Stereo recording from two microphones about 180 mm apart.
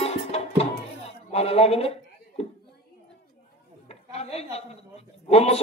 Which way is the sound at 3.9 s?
35° left (ahead or behind).